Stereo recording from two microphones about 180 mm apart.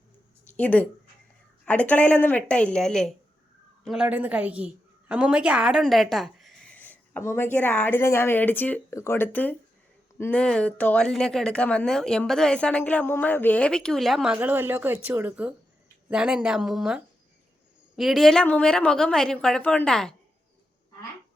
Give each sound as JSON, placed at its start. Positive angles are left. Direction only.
{"t": 0.5, "sound": "a woman's voice", "side_deg": 10}
{"t": 14.3, "sound": "speech", "side_deg": -10}